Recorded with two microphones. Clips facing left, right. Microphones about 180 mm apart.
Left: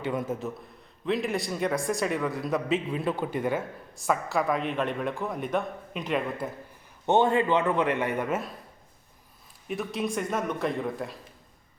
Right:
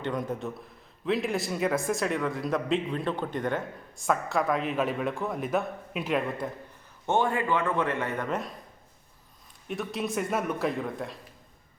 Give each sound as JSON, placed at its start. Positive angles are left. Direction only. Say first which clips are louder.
{"t": 0.0, "sound": "a man's voice", "louder": "left 1 dB", "side_deg": 5}
{"t": 7.0, "sound": "a man's voice", "louder": "left 4 dB", "side_deg": 20}
{"t": 9.6, "sound": "a man's voice", "louder": "left 1 dB", "side_deg": 0}